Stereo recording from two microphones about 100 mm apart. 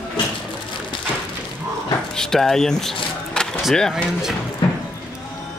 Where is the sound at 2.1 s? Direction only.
5° left (ahead or behind).